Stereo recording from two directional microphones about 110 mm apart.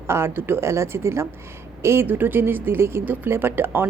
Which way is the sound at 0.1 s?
20° right (ahead or behind).